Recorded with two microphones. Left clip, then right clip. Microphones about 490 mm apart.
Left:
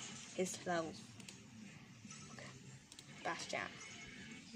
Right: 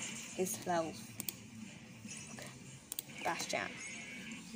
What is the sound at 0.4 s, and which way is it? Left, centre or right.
Speech, left.